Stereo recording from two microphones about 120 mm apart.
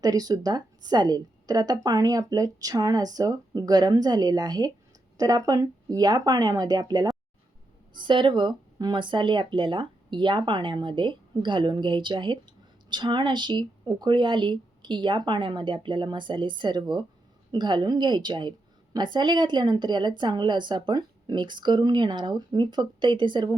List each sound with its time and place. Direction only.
0.0 s a woman's voice: 30° right (ahead or behind)